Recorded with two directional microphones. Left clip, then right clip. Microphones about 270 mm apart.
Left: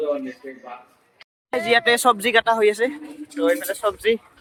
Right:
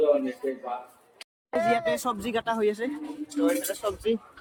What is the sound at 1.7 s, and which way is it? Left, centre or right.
Speech, centre.